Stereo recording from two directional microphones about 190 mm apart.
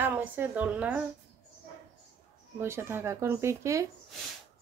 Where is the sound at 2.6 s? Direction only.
15° right (ahead or behind).